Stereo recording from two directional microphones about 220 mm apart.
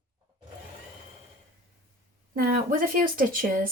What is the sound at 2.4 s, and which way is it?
Speech, 40° right (ahead or behind).